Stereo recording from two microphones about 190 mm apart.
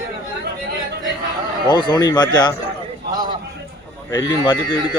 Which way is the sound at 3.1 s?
20° right (ahead or behind).